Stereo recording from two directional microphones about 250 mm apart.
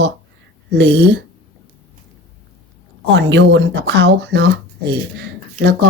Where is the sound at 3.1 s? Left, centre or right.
Right.